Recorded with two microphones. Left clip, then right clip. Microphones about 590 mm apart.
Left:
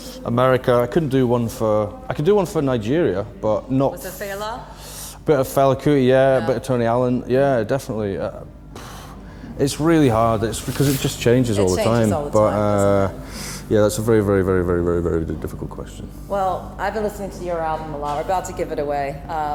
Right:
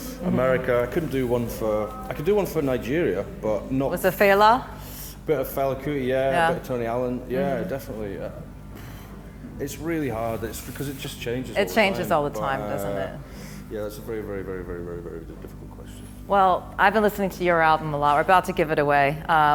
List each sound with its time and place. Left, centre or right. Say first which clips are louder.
0.3 s speech: left 5 dB; left
4.0 s speech: right 11 dB; right
5.2 s speech: left 8 dB; left
9.6 s speech: left 11 dB; left
11.5 s speech: left 3 dB; right
12.6 s speech: left 11 dB; left
16.3 s speech: right 2 dB; right